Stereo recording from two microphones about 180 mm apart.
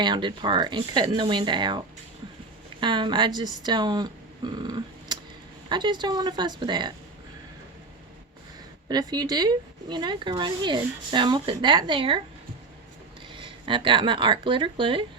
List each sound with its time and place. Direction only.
0.0 s speech: 25° right (ahead or behind)
2.8 s speech: 25° right (ahead or behind)
8.9 s speech: 20° right (ahead or behind)
13.4 s speech: 25° right (ahead or behind)